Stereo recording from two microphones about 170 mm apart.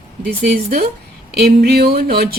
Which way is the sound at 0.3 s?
65° right (ahead or behind).